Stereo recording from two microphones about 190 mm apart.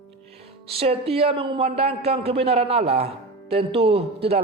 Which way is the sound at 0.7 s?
30° right (ahead or behind).